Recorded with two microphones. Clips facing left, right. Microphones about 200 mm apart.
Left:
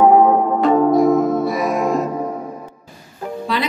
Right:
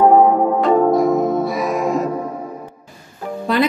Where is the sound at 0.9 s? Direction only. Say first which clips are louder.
Left 1 dB; centre (ahead or behind).